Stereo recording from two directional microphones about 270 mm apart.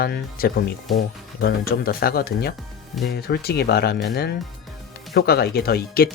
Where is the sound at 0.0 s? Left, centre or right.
Left.